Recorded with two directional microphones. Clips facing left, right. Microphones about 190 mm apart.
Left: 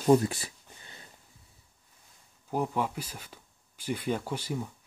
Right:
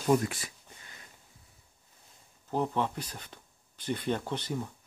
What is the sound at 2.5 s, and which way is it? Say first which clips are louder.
Speech: even; 10° left (ahead or behind).